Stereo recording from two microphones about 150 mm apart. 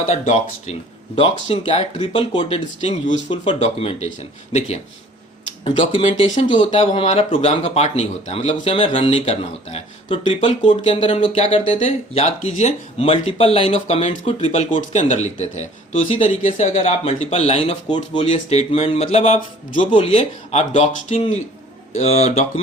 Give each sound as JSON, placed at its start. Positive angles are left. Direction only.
{"t": 0.1, "sound": "speech", "side_deg": 50}
{"t": 11.3, "sound": "speech", "side_deg": 45}
{"t": 14.7, "sound": "speech", "side_deg": 55}
{"t": 17.8, "sound": "speech", "side_deg": 30}
{"t": 19.9, "sound": "speech", "side_deg": 35}